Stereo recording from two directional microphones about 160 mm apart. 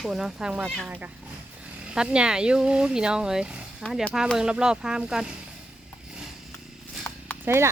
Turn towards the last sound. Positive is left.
turn(degrees=-15)  # may be behind; listen again after turning